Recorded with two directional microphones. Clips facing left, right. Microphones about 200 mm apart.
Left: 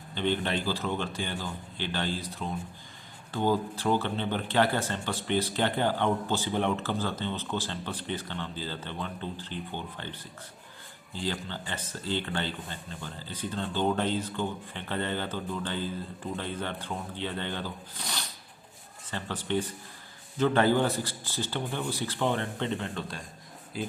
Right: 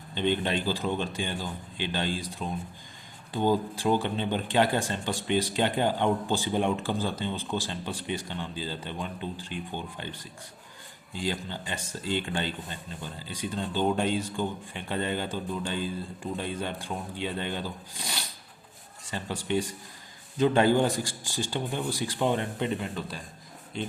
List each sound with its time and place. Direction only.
0.1 s speech: 15° right (ahead or behind); by 23.9 s 5° left (ahead or behind)